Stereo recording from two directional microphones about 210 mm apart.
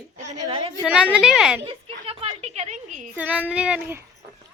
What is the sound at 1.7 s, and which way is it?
A woman's voice, 25° right (ahead or behind).